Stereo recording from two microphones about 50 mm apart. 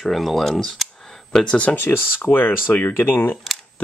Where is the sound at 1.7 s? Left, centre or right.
Left.